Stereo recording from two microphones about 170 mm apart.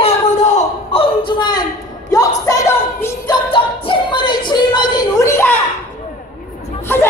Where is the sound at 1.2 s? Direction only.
25° left (ahead or behind).